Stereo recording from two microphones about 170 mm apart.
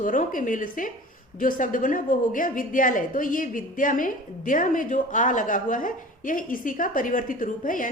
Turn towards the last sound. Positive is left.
turn(degrees=50)  # may be behind; listen again after turning